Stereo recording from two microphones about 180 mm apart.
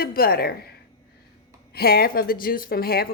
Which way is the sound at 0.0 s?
55° left (ahead or behind).